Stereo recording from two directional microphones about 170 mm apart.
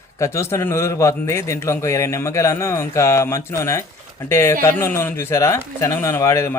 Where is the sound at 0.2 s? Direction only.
15° left (ahead or behind).